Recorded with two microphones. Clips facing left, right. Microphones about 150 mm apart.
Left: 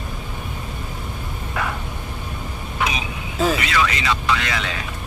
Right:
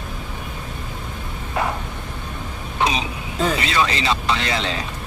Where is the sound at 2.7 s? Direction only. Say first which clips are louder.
Right 3 dB; 30° right (ahead or behind).